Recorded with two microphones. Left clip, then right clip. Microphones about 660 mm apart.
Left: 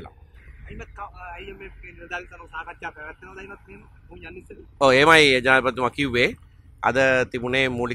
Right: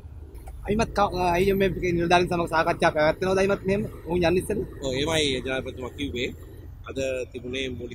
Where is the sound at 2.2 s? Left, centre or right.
Right.